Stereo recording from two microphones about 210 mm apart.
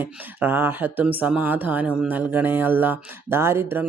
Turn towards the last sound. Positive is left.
turn(degrees=-10)  # may be behind; listen again after turning